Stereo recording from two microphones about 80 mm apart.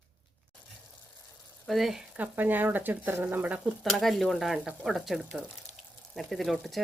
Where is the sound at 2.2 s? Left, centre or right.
Right.